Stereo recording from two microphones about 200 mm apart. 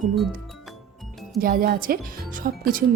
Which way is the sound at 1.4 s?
45° right (ahead or behind).